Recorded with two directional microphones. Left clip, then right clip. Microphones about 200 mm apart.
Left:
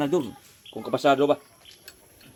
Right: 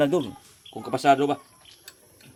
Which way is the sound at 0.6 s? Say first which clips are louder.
Left 1 dB; 40° right (ahead or behind).